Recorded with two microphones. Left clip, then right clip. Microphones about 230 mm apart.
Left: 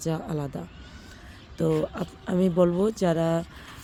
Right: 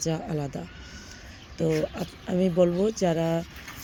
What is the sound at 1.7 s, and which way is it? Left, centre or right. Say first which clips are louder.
Speech: left 1 dB; centre.